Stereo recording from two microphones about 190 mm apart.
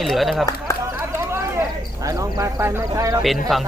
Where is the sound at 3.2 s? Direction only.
Centre (ahead or behind).